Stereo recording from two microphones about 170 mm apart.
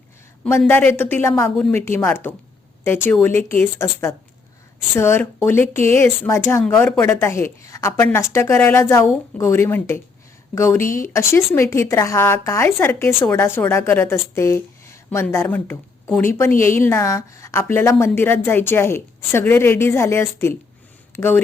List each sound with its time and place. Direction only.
0.4 s a woman's voice: 10° left (ahead or behind)